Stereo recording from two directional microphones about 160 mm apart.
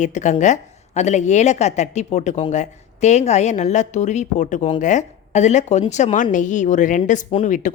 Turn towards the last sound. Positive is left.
turn(degrees=55)  # may be behind; listen again after turning